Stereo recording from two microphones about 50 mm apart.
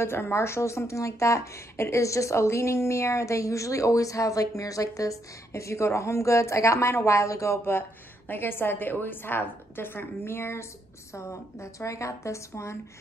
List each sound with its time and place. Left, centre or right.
0.0 s speech: left
8.3 s a woman's voice: left
11.1 s a woman's voice: left